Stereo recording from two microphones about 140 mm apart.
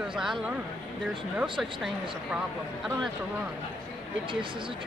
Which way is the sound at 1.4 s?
5° right (ahead or behind).